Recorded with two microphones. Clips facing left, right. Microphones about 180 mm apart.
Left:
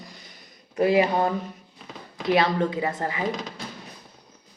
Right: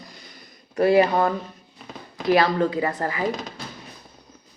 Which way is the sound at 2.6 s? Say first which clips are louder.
Right 3 dB; 20° left (ahead or behind).